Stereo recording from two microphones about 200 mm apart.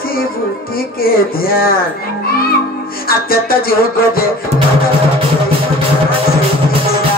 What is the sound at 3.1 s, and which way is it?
Music, 45° left (ahead or behind).